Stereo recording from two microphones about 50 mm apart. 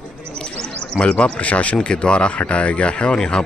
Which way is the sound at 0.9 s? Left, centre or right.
Left.